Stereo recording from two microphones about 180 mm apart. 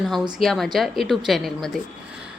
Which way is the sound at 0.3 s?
Centre (ahead or behind).